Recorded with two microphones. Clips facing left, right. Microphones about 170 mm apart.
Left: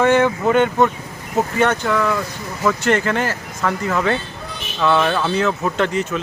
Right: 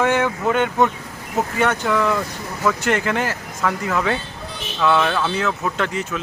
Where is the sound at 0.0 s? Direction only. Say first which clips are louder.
Left 4 dB; 5° right (ahead or behind).